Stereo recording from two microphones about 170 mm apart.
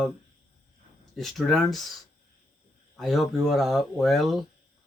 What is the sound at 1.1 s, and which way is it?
Speech, centre (ahead or behind).